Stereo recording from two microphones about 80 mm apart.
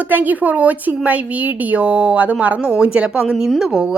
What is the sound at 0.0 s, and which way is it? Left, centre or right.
A woman's voice, right.